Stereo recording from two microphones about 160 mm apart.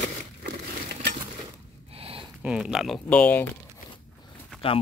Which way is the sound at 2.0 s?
35° right (ahead or behind).